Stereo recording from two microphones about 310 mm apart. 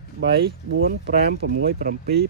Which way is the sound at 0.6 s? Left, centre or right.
Right.